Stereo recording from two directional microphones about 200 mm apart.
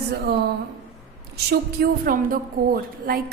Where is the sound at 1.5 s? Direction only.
50° right (ahead or behind).